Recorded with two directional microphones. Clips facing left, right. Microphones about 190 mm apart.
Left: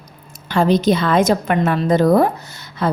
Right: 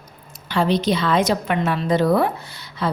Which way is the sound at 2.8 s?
50° left (ahead or behind).